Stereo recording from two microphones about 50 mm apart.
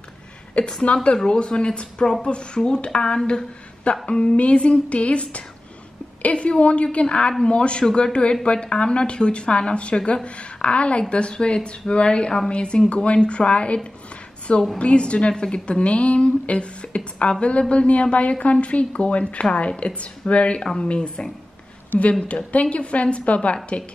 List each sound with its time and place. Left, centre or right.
0.6 s a woman's voice: centre
14.8 s a woman's voice: left
20.6 s a woman's voice: centre
21.9 s a woman's voice: left
22.5 s a woman's voice: left